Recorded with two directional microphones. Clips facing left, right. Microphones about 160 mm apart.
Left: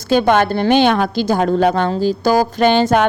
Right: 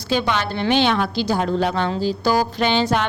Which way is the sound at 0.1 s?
50° left (ahead or behind).